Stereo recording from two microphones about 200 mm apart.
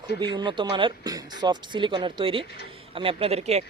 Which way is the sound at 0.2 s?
25° right (ahead or behind).